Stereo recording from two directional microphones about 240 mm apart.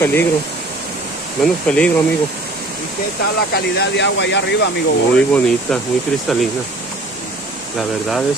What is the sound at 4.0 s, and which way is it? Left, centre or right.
Speech, left.